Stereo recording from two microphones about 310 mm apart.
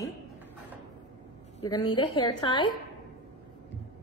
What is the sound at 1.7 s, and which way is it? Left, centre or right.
Speech, centre.